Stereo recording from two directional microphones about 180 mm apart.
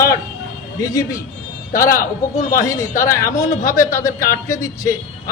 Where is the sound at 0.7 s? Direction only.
20° left (ahead or behind).